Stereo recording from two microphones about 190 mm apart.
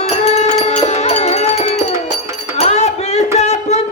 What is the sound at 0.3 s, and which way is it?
Music, 35° left (ahead or behind).